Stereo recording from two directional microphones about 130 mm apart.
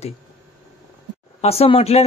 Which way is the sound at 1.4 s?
50° left (ahead or behind).